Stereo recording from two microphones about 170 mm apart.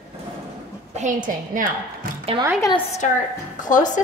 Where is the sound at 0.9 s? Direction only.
50° right (ahead or behind).